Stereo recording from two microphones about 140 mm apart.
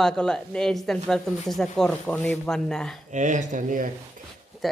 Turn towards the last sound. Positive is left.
turn(degrees=0)  # may be behind; listen again after turning